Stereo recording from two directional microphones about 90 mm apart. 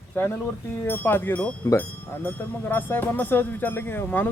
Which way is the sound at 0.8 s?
20° left (ahead or behind).